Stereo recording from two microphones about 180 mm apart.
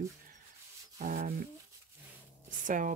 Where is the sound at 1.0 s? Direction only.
50° right (ahead or behind).